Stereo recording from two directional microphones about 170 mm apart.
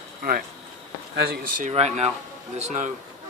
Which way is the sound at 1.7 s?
40° right (ahead or behind).